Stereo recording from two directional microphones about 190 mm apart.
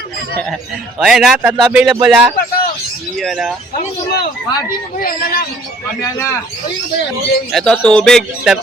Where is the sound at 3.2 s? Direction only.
Centre (ahead or behind).